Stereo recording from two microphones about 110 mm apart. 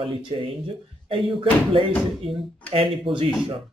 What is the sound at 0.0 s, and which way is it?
Speech, 50° right (ahead or behind).